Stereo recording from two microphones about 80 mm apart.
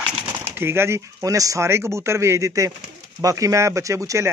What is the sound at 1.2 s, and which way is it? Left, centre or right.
Speech, right.